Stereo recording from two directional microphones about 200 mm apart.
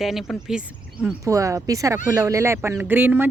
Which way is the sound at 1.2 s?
15° right (ahead or behind).